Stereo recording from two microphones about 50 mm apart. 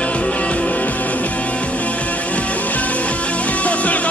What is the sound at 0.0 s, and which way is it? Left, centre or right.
Music, left.